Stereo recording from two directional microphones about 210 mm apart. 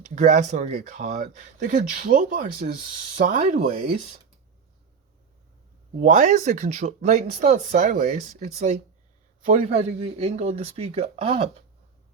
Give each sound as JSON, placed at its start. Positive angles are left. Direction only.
{"t": 0.0, "sound": "speech", "side_deg": -35}
{"t": 6.0, "sound": "speech", "side_deg": -35}